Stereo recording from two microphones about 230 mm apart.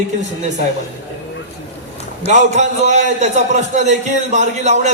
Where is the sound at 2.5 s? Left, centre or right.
Right.